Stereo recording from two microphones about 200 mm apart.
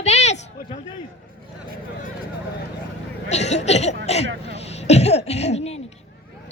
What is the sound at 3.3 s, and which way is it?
Speech, 35° left (ahead or behind).